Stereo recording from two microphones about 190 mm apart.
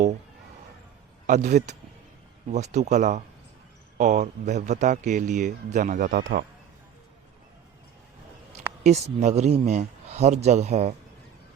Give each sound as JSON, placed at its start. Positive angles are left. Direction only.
{"t": 1.3, "sound": "a man's voice", "side_deg": -40}
{"t": 8.5, "sound": "a sound", "side_deg": -35}
{"t": 9.2, "sound": "a man's voice", "side_deg": -35}